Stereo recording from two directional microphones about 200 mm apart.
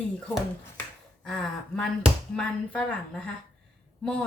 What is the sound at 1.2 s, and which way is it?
A woman's voice, centre (ahead or behind).